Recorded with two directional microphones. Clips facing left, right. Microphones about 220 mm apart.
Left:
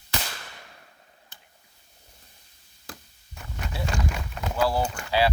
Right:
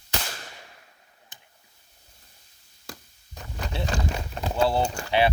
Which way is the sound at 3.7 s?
30° right (ahead or behind).